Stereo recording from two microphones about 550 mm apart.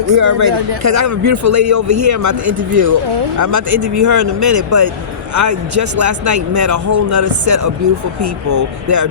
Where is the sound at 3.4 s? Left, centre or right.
Right.